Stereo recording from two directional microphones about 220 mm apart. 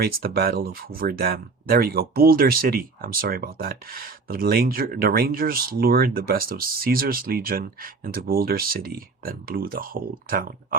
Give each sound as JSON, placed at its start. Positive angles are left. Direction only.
{"t": 0.0, "sound": "speech", "side_deg": -45}